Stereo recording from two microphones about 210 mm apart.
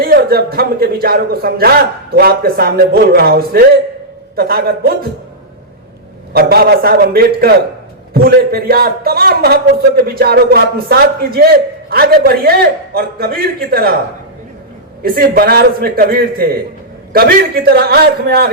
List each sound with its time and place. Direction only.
0.0 s a man's voice: 45° right (ahead or behind)
6.3 s a man's voice: 50° right (ahead or behind)
15.0 s a man's voice: 45° right (ahead or behind)